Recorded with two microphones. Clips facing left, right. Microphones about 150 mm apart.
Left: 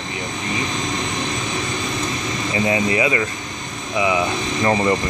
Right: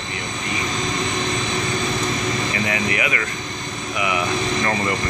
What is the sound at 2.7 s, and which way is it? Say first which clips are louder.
Speech: left 5 dB; 25° left (ahead or behind).